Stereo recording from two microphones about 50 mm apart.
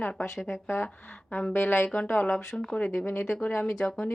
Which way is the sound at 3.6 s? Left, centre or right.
Left.